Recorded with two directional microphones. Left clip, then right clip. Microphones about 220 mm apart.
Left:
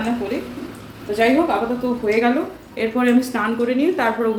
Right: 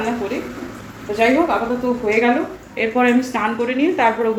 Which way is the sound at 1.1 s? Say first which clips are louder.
Right 1 dB; 15° left (ahead or behind).